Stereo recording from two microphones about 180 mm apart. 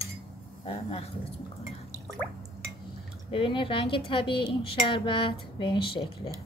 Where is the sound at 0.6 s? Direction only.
35° left (ahead or behind).